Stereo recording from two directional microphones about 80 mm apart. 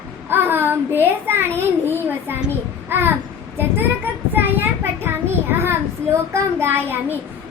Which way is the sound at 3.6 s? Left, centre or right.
Right.